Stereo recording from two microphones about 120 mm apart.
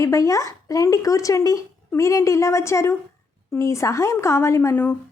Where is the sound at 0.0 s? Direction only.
25° left (ahead or behind).